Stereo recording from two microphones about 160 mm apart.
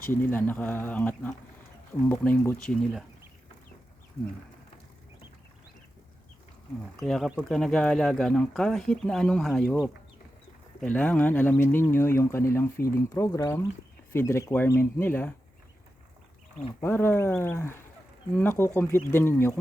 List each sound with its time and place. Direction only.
0.1 s speech: 15° left (ahead or behind)
7.0 s speech: centre (ahead or behind)
16.8 s speech: 15° left (ahead or behind)